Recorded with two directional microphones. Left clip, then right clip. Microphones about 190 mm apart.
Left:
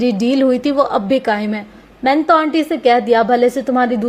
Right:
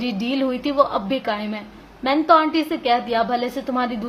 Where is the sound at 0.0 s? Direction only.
35° left (ahead or behind).